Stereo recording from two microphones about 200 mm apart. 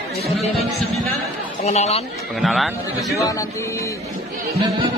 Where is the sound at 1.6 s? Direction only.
30° left (ahead or behind).